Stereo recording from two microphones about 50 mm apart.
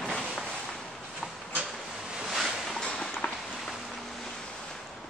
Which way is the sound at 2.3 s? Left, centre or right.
Centre.